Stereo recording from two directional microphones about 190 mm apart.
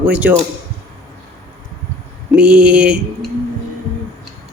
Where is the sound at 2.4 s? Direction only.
5° right (ahead or behind).